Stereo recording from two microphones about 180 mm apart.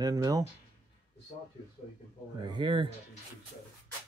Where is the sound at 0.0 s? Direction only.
20° right (ahead or behind).